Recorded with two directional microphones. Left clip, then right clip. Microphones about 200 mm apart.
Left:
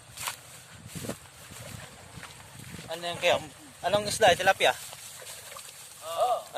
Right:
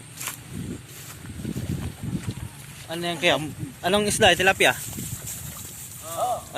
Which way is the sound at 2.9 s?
5° right (ahead or behind).